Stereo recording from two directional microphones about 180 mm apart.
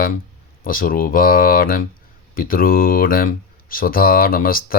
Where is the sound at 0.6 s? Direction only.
50° left (ahead or behind).